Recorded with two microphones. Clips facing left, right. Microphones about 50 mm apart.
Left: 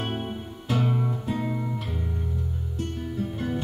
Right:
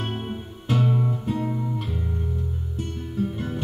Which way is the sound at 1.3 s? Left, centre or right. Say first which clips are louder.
Right 2 dB; left.